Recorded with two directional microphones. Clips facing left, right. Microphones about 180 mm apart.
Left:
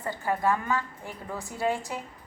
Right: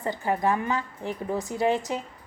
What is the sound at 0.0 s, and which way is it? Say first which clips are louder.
A woman's voice: right 2 dB; 20° right (ahead or behind).